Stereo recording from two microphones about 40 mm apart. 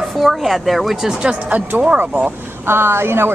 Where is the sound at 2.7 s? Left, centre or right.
Right.